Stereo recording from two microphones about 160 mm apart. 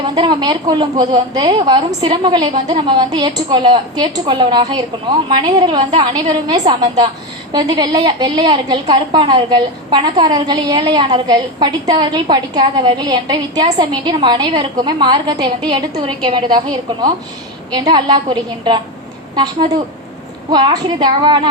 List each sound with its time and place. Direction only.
0.0 s a woman's voice: 30° right (ahead or behind)
20.5 s a woman's voice: 30° right (ahead or behind)